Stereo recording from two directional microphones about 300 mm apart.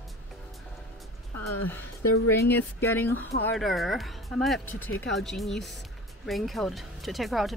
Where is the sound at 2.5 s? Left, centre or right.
Centre.